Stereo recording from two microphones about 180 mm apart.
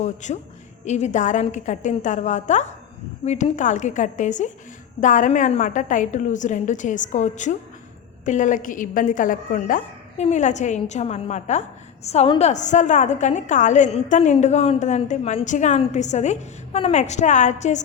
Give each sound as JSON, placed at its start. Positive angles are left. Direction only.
{"t": 0.0, "sound": "a woman's voice", "side_deg": 40}